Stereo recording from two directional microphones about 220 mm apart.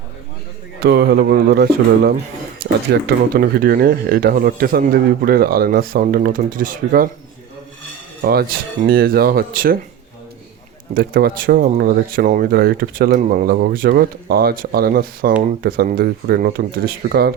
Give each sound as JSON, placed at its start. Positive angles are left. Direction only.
{"t": 0.8, "sound": "speech", "side_deg": -50}
{"t": 2.9, "sound": "speech", "side_deg": -40}
{"t": 8.2, "sound": "speech", "side_deg": -45}
{"t": 10.9, "sound": "speech", "side_deg": -40}